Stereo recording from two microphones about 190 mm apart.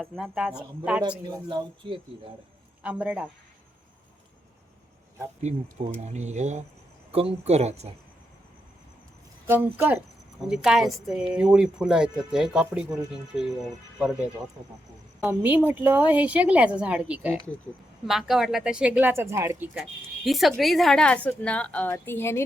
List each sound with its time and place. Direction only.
0.0 s speech: centre (ahead or behind)
1.3 s speech: 20° right (ahead or behind)
2.8 s a woman's voice: 5° right (ahead or behind)
6.0 s speech: 35° right (ahead or behind)
9.5 s a woman's voice: 10° right (ahead or behind)
19.7 s a woman's voice: centre (ahead or behind)